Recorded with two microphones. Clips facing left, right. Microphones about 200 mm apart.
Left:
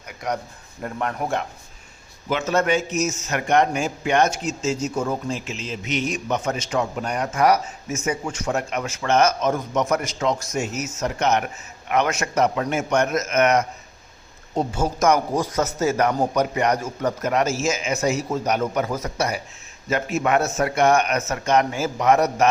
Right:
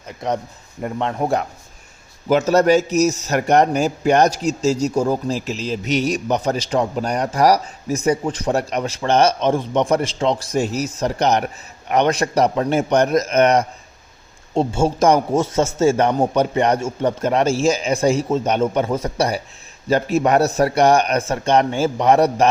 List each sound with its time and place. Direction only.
0.8 s a man's voice: 20° right (ahead or behind)
2.3 s a man's voice: 40° right (ahead or behind)